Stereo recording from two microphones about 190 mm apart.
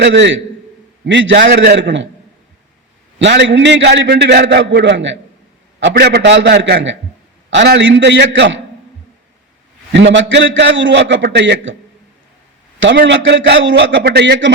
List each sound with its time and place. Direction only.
0.0 s a man's voice: 70° right (ahead or behind)
1.5 s a man's voice: 60° right (ahead or behind); by 2.0 s 75° right (ahead or behind)
3.2 s a man's voice: 70° right (ahead or behind)
5.8 s a man's voice: 60° right (ahead or behind); by 8.6 s 80° right
9.9 s a man's voice: 70° right (ahead or behind)
13.0 s a man's voice: 65° right (ahead or behind)